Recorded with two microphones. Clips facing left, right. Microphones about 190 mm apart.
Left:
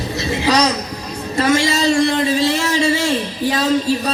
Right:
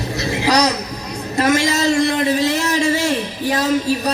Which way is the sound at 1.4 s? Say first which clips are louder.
Even; 20° right (ahead or behind).